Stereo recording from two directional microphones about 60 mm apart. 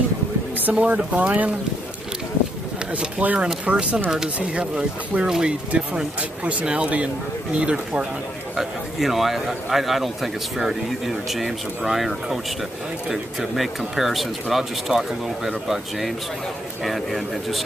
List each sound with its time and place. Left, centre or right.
0.7 s speech: right
2.9 s speech: right
8.5 s a man's voice: centre